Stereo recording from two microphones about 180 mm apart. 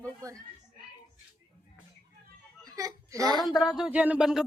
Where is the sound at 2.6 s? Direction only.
20° right (ahead or behind).